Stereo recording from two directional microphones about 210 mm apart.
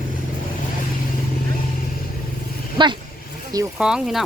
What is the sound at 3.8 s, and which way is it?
Speech, 5° right (ahead or behind).